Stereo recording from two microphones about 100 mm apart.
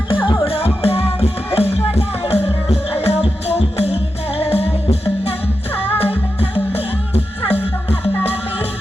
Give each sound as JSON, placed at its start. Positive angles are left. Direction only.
{"t": 0.1, "sound": "music", "side_deg": 55}
{"t": 0.4, "sound": "music", "side_deg": 75}